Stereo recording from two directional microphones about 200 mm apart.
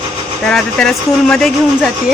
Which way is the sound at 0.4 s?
5° left (ahead or behind).